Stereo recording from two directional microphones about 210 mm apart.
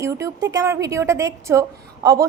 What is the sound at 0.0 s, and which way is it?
A woman's voice, 15° right (ahead or behind).